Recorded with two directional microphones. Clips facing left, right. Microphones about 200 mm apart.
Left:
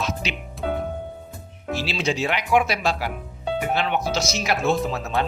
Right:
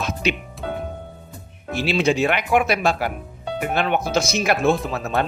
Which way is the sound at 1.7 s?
55° right (ahead or behind).